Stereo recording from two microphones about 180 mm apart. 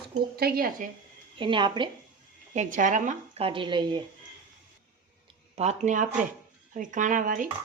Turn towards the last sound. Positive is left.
turn(degrees=-45)  # may be behind; listen again after turning